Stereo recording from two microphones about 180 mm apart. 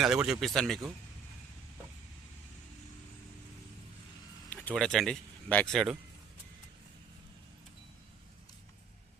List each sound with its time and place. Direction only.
0.0 s speech: 5° right (ahead or behind)
4.4 s speech: 5° left (ahead or behind)